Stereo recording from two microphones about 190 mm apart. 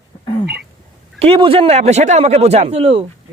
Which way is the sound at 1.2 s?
30° right (ahead or behind).